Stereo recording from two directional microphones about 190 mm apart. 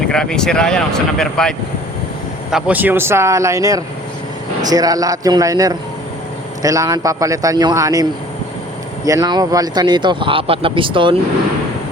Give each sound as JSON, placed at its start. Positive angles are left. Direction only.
{"t": 0.1, "sound": "a man's voice", "side_deg": 5}
{"t": 9.0, "sound": "speech", "side_deg": -20}